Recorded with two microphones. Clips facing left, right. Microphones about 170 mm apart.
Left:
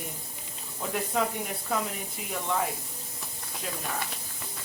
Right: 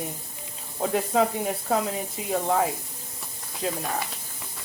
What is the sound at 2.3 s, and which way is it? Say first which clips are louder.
Speech: right 6 dB; 40° right (ahead or behind).